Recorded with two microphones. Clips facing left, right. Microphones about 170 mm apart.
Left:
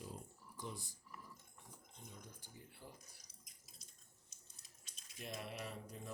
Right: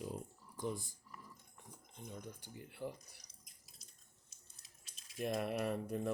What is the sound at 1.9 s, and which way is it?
Speech, 65° right (ahead or behind).